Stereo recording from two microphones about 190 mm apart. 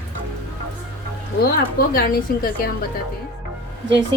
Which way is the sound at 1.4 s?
50° left (ahead or behind).